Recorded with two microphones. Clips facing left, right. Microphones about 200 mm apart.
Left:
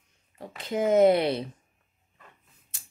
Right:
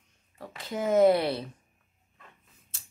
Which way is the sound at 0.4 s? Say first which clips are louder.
Left 5 dB; 20° left (ahead or behind).